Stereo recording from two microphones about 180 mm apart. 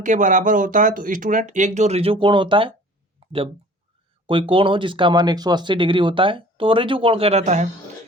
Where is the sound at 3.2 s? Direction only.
30° right (ahead or behind).